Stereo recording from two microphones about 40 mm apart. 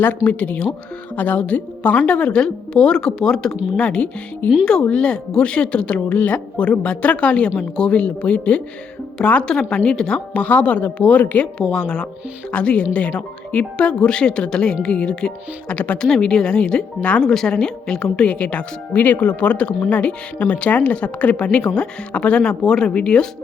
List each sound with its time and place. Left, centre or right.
0.3 s speech: left; by 3.6 s centre
3.8 s a woman's voice: left
9.5 s a woman's voice: centre
10.3 s speech: left
11.7 s a woman's voice: left
16.0 s speech: centre
16.2 s a woman's voice: left
17.2 s a woman's voice: centre
18.3 s a woman's voice: left